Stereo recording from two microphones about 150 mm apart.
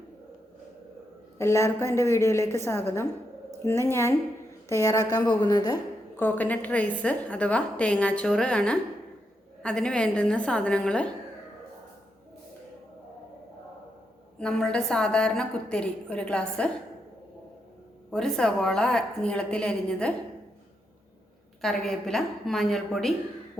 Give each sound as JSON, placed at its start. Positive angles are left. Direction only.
{"t": 1.4, "sound": "a woman's voice", "side_deg": 20}
{"t": 6.1, "sound": "a woman's voice", "side_deg": 10}
{"t": 14.3, "sound": "a woman's voice", "side_deg": 5}
{"t": 18.1, "sound": "a woman's voice", "side_deg": 5}
{"t": 21.6, "sound": "a woman's voice", "side_deg": 0}